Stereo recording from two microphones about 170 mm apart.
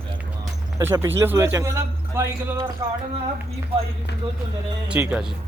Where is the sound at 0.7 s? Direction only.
20° right (ahead or behind).